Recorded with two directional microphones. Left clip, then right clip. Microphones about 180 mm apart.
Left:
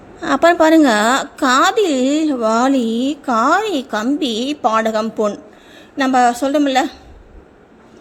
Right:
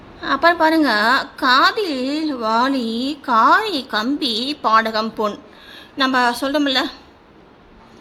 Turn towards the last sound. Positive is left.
turn(degrees=15)  # may be behind; listen again after turning